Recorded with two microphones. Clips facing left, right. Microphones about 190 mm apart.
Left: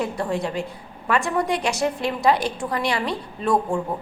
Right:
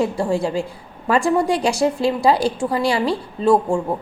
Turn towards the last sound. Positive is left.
turn(degrees=-25)  # may be behind; listen again after turning